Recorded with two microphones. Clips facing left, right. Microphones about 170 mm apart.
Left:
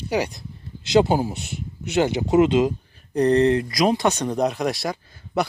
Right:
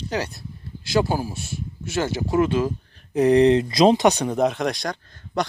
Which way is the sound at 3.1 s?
5° right (ahead or behind).